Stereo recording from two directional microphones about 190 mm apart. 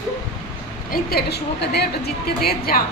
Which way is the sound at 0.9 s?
55° left (ahead or behind).